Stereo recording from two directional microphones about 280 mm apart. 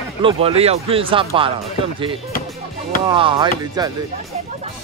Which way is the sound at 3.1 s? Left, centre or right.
Centre.